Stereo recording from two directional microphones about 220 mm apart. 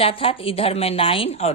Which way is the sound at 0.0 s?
25° left (ahead or behind).